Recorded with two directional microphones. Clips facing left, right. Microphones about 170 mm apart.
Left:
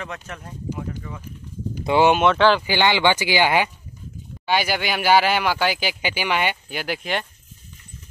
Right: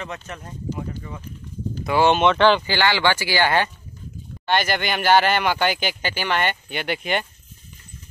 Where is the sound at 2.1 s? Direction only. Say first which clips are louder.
Even; 5° left (ahead or behind).